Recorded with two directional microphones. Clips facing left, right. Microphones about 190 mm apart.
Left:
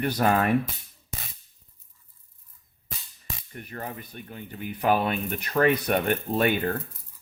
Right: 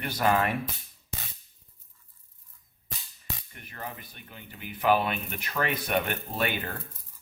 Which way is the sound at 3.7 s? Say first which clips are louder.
Left 4 dB; 45° left (ahead or behind).